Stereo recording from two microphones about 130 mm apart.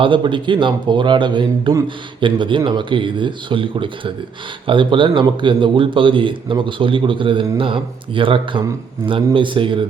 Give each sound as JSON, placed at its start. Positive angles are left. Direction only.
{"t": 0.0, "sound": "a man's voice", "side_deg": -40}